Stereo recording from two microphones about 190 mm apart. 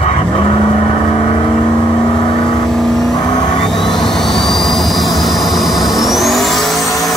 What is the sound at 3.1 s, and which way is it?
Vehicle, 20° left (ahead or behind).